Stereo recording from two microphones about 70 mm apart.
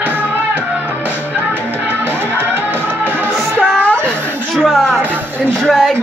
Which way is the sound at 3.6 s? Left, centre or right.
Centre.